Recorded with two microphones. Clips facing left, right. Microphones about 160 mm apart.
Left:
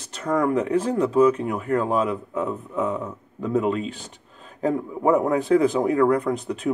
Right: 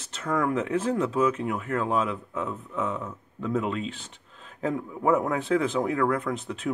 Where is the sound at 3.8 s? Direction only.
40° left (ahead or behind).